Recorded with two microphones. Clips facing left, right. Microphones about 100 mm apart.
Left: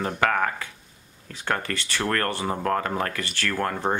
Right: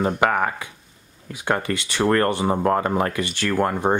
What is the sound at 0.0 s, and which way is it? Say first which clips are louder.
Speech: right 4 dB; 15° right (ahead or behind).